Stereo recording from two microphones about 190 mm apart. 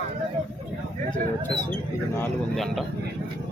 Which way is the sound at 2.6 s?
Centre (ahead or behind).